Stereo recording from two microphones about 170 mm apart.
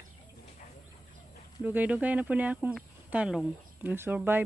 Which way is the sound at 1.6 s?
10° right (ahead or behind).